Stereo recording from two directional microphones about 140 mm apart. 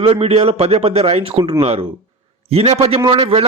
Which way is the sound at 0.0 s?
40° right (ahead or behind).